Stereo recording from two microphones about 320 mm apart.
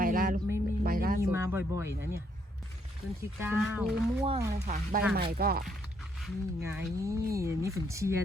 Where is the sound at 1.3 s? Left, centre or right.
Centre.